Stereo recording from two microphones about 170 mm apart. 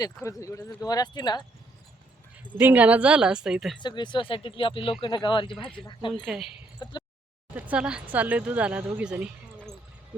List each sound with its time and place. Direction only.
0.0 s speech: 20° left (ahead or behind)
2.6 s a woman's voice: 10° right (ahead or behind)
3.8 s speech: 25° left (ahead or behind)
6.2 s a woman's voice: centre (ahead or behind)
6.8 s speech: 25° left (ahead or behind)
7.5 s speech: 5° right (ahead or behind)